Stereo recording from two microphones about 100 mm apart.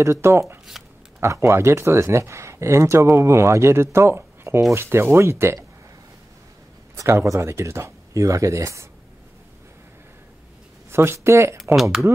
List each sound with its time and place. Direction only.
0.0 s speech: 30° right (ahead or behind)
7.0 s speech: 30° right (ahead or behind)
10.9 s speech: 25° right (ahead or behind)
11.7 s speech: centre (ahead or behind)